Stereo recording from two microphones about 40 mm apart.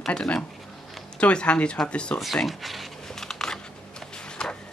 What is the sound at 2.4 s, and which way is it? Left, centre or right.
Speech, centre.